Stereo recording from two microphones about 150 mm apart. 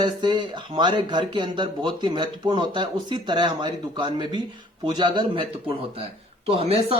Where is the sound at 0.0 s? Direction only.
30° right (ahead or behind).